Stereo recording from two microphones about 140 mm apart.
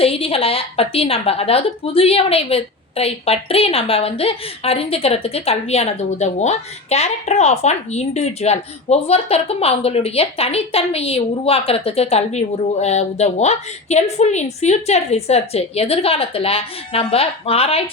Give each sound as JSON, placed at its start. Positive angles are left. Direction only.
{"t": 0.0, "sound": "a woman's voice", "side_deg": 45}